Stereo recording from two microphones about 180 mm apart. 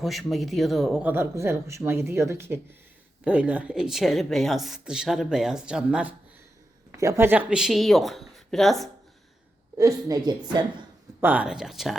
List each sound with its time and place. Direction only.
0.0 s speech: centre (ahead or behind)
6.9 s speech: 20° right (ahead or behind); by 8.9 s centre (ahead or behind)
9.7 s a woman's voice: 20° right (ahead or behind)
11.2 s speech: 10° right (ahead or behind)